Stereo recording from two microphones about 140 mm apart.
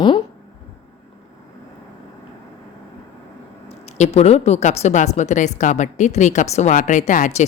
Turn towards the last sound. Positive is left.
turn(degrees=60)  # may be behind; listen again after turning